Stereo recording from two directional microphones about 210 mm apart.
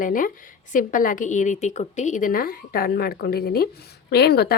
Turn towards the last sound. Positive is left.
turn(degrees=50)  # may be behind; listen again after turning